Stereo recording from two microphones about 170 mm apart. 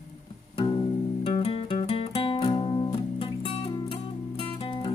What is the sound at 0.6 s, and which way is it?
Music, 30° left (ahead or behind).